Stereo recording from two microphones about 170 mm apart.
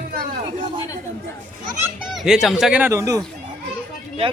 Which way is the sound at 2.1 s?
Centre (ahead or behind).